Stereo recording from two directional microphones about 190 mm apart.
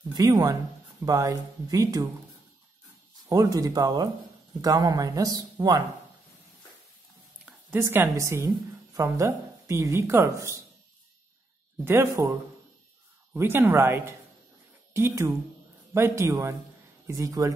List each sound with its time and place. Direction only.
0.1 s speech: 20° right (ahead or behind)
3.3 s speech: 20° right (ahead or behind)
7.4 s a woman's voice: 10° right (ahead or behind)
11.8 s a woman's voice: 15° right (ahead or behind)